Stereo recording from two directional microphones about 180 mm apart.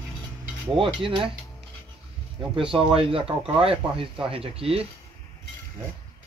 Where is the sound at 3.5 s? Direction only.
30° right (ahead or behind).